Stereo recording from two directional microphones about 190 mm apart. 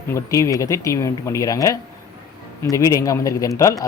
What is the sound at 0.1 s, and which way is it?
Speech, 15° left (ahead or behind).